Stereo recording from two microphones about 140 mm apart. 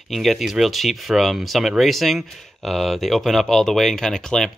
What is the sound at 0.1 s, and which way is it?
Speech, centre (ahead or behind).